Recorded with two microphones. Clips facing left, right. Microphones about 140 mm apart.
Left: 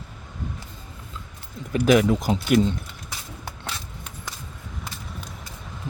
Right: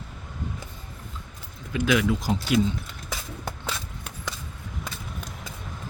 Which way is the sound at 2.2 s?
65° left (ahead or behind).